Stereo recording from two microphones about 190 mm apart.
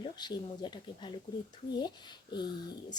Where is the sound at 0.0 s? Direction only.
25° left (ahead or behind).